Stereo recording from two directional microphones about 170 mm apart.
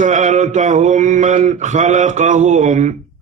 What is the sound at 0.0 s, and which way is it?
Mantra, 45° right (ahead or behind).